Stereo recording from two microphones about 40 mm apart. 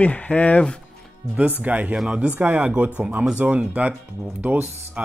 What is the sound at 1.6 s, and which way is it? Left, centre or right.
Speech, right.